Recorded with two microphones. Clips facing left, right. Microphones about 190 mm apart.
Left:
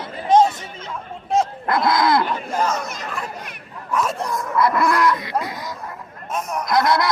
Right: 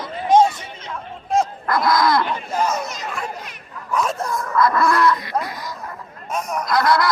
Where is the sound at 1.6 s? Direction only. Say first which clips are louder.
Even; 25° left (ahead or behind).